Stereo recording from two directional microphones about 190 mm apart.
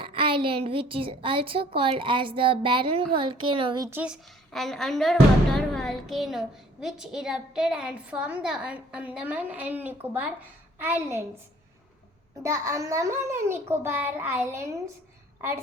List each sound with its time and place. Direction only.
0.0 s a woman's voice: 25° right (ahead or behind)
3.8 s a woman's voice: 10° right (ahead or behind)
12.4 s a child's voice: 15° right (ahead or behind)